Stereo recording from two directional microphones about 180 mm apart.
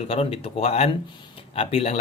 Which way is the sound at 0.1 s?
35° left (ahead or behind).